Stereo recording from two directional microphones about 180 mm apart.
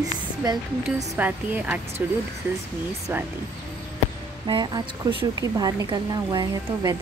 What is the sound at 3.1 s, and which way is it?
Speech, 10° right (ahead or behind).